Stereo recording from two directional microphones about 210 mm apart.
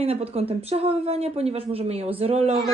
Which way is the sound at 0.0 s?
30° right (ahead or behind).